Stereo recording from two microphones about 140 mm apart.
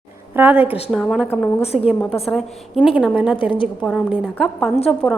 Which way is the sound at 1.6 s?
45° left (ahead or behind).